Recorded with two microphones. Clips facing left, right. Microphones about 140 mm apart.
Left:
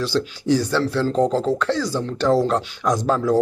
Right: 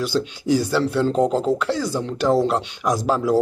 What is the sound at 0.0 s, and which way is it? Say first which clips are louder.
Speech: even; 10° right (ahead or behind).